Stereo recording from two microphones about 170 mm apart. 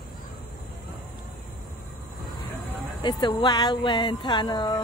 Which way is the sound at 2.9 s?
25° left (ahead or behind).